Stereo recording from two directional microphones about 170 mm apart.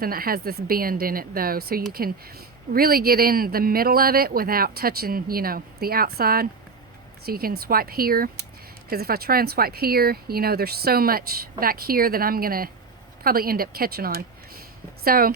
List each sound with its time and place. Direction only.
0.0 s speech: 60° right (ahead or behind)